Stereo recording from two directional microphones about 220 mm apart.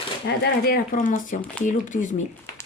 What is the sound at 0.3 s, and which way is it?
Speech, 45° left (ahead or behind).